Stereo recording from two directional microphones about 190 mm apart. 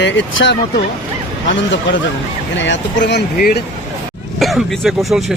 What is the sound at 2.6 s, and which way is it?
Speech, 70° left (ahead or behind).